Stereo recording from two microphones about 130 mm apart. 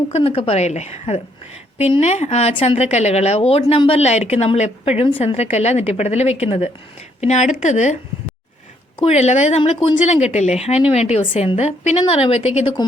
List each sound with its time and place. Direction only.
0.1 s speech: 50° left (ahead or behind)
7.2 s a woman's voice: 60° left (ahead or behind)
9.0 s a woman's voice: 55° left (ahead or behind)